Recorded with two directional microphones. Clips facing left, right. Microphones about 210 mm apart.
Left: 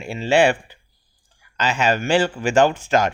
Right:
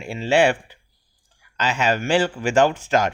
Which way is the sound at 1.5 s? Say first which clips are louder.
Left 1 dB; 30° left (ahead or behind).